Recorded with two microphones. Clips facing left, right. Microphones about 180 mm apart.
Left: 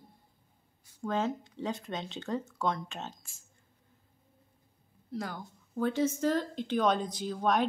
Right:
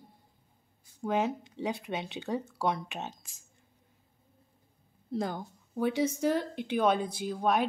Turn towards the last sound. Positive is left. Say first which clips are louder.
# even
turn(degrees=-5)  # may be behind; listen again after turning